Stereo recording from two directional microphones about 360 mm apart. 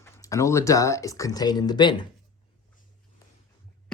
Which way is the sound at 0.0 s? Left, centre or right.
Centre.